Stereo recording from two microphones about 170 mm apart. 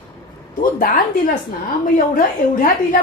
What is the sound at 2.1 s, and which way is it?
Speech, 55° left (ahead or behind).